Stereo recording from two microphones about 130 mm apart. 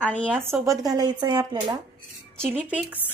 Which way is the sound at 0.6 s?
25° right (ahead or behind).